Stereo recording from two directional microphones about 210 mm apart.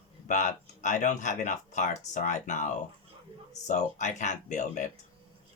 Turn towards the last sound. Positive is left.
turn(degrees=35)  # may be behind; listen again after turning